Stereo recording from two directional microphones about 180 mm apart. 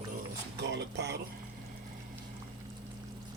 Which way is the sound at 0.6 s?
70° right (ahead or behind).